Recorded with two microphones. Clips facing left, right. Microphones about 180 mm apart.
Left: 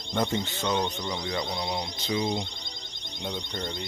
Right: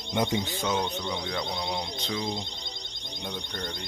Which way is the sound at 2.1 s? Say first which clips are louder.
Left 5 dB; 10° left (ahead or behind).